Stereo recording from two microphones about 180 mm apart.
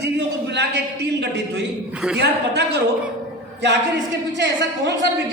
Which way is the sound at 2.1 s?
65° right (ahead or behind).